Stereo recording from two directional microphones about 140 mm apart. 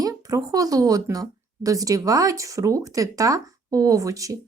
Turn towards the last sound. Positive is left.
turn(degrees=-25)  # may be behind; listen again after turning